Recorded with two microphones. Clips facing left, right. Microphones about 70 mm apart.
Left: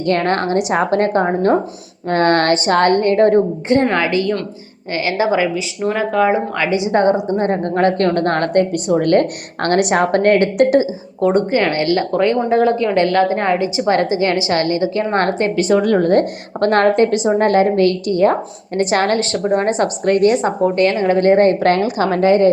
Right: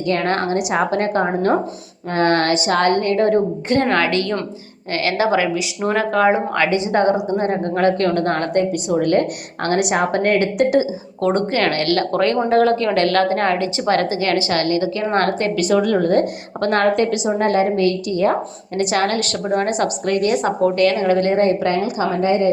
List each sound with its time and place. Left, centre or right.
0.3 s a woman's voice: left
3.7 s a woman's voice: centre
5.5 s a woman's voice: centre
6.9 s a woman's voice: left
11.2 s a woman's voice: centre; by 17.5 s left
17.5 s a woman's voice: left
21.4 s a woman's voice: left